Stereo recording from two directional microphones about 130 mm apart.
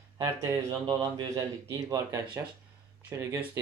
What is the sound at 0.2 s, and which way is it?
Speech, 30° right (ahead or behind).